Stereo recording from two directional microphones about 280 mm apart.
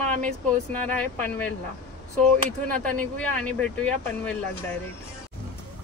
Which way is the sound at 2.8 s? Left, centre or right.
Centre.